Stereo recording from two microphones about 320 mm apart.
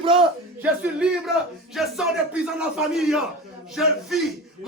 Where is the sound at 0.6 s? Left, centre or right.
Centre.